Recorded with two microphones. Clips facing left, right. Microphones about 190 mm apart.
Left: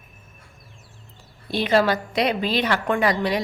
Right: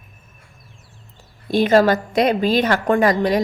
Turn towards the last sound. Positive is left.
turn(degrees=-45)  # may be behind; listen again after turning